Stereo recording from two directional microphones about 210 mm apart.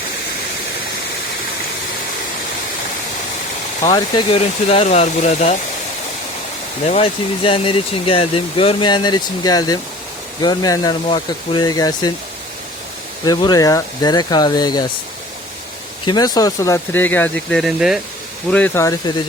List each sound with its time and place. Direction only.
3.8 s speech: 20° left (ahead or behind)
6.8 s speech: 30° left (ahead or behind)
13.2 s speech: 20° left (ahead or behind)
16.0 s speech: 20° left (ahead or behind); by 18.0 s centre (ahead or behind)
18.5 s speech: 10° left (ahead or behind)